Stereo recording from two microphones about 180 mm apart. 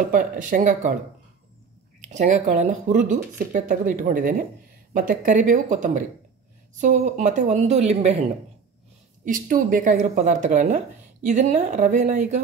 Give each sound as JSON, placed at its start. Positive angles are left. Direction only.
{"t": 0.1, "sound": "speech", "side_deg": -45}
{"t": 2.0, "sound": "a woman's voice", "side_deg": -40}
{"t": 9.2, "sound": "speech", "side_deg": -50}